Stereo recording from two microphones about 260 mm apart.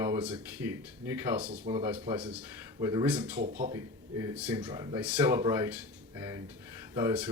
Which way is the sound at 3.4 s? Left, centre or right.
Right.